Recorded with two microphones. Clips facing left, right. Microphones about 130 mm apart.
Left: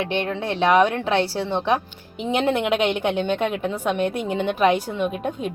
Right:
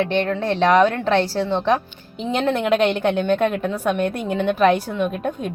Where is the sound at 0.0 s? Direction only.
10° left (ahead or behind).